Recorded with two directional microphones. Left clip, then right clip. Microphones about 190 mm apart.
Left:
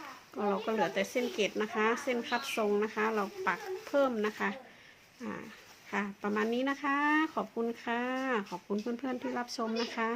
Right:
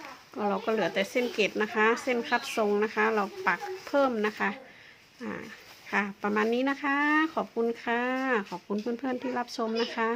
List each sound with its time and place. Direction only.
0.3 s speech: 15° right (ahead or behind)